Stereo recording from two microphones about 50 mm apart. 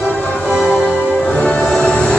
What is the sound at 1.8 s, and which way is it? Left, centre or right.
Music, centre.